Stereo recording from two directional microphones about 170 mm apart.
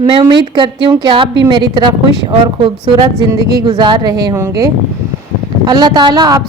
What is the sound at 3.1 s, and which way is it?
A woman's voice, 20° right (ahead or behind).